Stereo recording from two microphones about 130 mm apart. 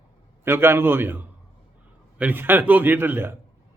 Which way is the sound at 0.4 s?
20° right (ahead or behind).